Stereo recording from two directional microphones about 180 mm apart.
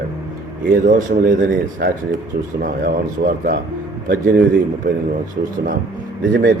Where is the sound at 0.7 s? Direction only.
50° right (ahead or behind).